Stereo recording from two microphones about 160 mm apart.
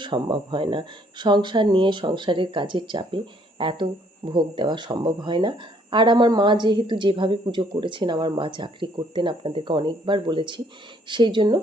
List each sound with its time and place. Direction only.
0.0 s speech: 30° right (ahead or behind)